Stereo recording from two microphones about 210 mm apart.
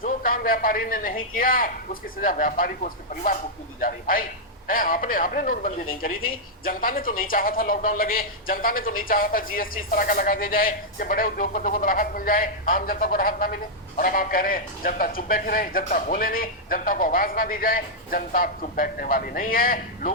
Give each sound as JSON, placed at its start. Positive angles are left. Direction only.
{"t": 0.0, "sound": "speech", "side_deg": 40}